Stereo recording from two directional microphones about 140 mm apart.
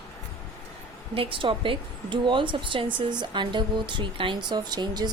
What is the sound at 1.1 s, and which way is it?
A woman's voice, 40° right (ahead or behind).